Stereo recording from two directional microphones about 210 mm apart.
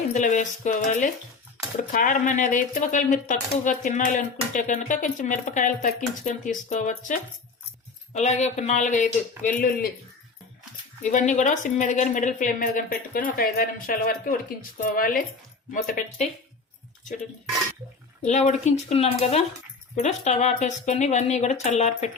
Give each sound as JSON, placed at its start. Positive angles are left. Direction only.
{"t": 0.1, "sound": "speech", "side_deg": 35}
{"t": 11.1, "sound": "a woman's voice", "side_deg": 35}
{"t": 18.3, "sound": "speech", "side_deg": 35}